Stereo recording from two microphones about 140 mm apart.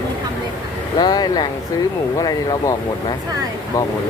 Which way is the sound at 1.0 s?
30° left (ahead or behind).